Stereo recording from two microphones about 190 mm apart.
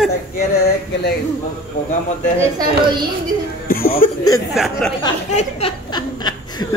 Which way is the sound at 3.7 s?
50° left (ahead or behind).